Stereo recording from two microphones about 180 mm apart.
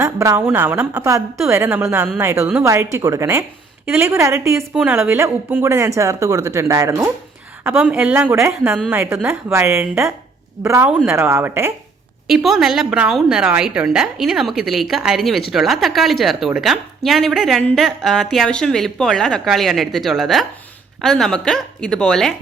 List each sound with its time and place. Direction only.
0.0 s speech: 15° right (ahead or behind)
12.3 s speech: centre (ahead or behind)